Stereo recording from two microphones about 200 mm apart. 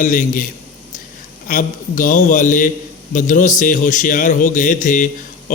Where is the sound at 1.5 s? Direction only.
40° left (ahead or behind).